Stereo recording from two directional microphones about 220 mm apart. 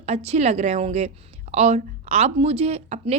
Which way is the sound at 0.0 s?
30° right (ahead or behind).